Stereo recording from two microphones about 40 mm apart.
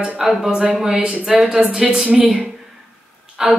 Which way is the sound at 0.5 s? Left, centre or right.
Right.